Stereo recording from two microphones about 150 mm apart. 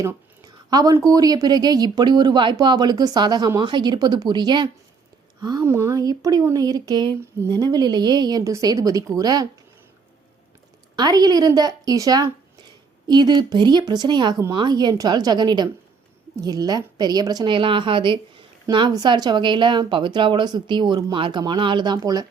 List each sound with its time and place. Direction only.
0.0 s speech: 25° right (ahead or behind)
10.9 s a woman's voice: 25° right (ahead or behind)